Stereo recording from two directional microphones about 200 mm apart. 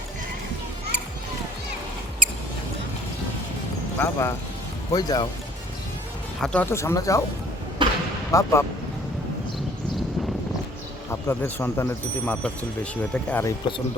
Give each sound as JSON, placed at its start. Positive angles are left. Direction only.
{"t": 3.9, "sound": "speech", "side_deg": 15}
{"t": 6.4, "sound": "speech", "side_deg": 5}
{"t": 7.8, "sound": "a sound", "side_deg": -25}
{"t": 8.3, "sound": "speech", "side_deg": 15}
{"t": 11.1, "sound": "speech", "side_deg": 10}